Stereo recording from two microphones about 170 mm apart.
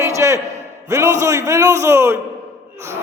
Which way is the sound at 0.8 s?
15° right (ahead or behind).